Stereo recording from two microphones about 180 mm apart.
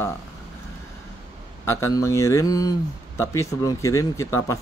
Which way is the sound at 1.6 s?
15° left (ahead or behind).